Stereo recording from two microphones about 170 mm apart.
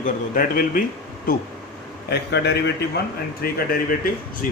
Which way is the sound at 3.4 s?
60° left (ahead or behind).